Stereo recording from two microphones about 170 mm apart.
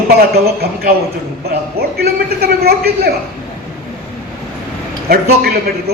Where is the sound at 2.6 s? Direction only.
65° right (ahead or behind).